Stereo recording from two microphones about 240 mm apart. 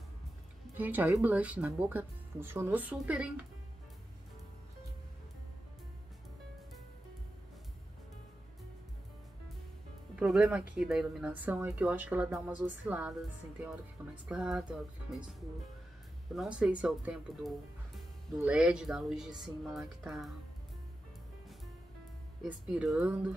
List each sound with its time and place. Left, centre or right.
0.7 s speech: centre
10.1 s speech: centre
16.3 s speech: centre
22.4 s speech: centre